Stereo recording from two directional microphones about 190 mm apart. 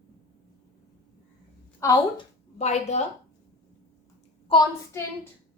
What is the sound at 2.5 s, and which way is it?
Speech, 35° left (ahead or behind).